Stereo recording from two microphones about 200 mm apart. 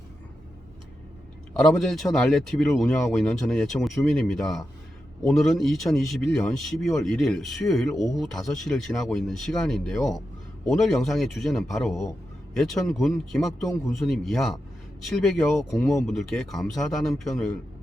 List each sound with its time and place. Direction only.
1.5 s a man's voice: centre (ahead or behind)